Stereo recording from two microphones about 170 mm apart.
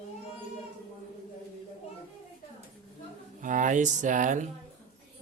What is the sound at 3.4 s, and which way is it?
Speech, 50° right (ahead or behind).